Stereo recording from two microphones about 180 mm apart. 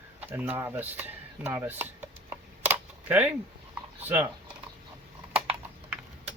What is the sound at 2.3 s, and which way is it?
Camera, 10° right (ahead or behind).